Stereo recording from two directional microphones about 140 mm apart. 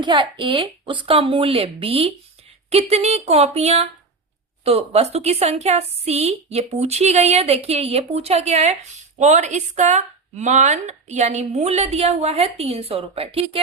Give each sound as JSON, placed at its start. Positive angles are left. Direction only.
{"t": 0.0, "sound": "a woman's voice", "side_deg": -35}